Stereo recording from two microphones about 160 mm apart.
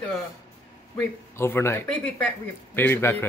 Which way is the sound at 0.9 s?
15° left (ahead or behind).